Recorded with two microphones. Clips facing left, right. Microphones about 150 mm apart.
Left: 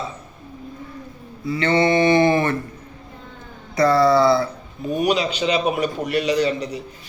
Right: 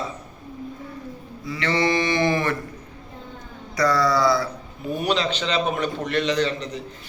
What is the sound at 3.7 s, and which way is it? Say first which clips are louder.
Mantra: left 5 dB; 25° left (ahead or behind).